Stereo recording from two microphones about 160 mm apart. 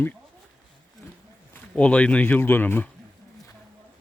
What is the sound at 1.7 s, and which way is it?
Speech, 10° left (ahead or behind).